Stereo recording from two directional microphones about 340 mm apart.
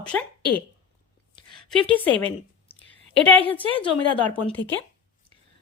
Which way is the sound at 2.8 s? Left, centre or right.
Centre.